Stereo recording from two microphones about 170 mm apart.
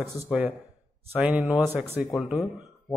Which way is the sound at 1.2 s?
5° right (ahead or behind).